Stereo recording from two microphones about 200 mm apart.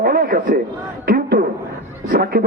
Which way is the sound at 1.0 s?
45° right (ahead or behind).